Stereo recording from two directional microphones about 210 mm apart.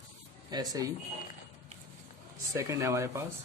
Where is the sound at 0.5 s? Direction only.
20° right (ahead or behind).